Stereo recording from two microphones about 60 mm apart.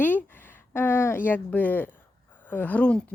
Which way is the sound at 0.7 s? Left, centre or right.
Left.